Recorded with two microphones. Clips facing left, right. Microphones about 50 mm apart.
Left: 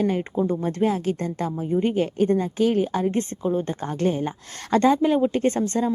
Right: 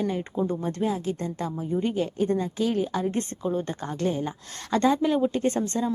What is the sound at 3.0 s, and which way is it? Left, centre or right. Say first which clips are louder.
Speech: left 4 dB; left.